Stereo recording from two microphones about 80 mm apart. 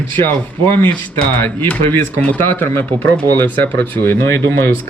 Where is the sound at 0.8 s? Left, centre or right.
Left.